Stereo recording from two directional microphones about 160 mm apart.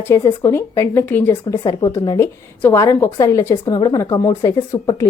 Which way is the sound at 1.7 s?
25° left (ahead or behind).